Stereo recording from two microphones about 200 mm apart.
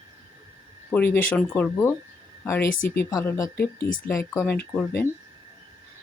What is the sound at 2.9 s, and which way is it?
Speech, 15° left (ahead or behind).